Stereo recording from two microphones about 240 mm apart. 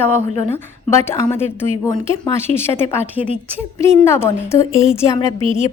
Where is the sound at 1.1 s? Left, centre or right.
Centre.